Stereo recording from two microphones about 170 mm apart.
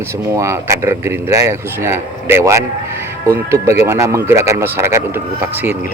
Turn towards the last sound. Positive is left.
turn(degrees=-15)  # may be behind; listen again after turning